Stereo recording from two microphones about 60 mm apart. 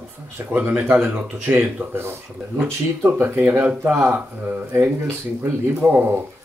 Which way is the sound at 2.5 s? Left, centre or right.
Right.